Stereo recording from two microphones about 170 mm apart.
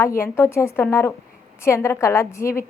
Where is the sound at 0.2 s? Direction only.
15° left (ahead or behind).